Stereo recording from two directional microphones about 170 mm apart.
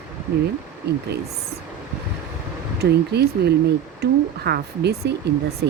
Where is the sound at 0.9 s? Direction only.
75° right (ahead or behind).